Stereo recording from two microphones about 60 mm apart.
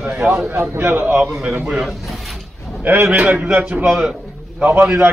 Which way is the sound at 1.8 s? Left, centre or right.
Centre.